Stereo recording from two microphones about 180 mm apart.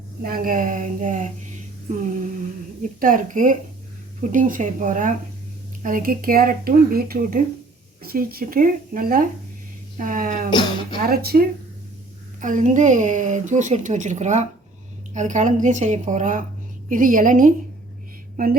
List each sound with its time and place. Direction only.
0.2 s a woman's voice: 55° right (ahead or behind)
3.0 s a woman's voice: 45° right (ahead or behind)
11.0 s speech: 60° right (ahead or behind)
12.4 s a woman's voice: 45° right (ahead or behind)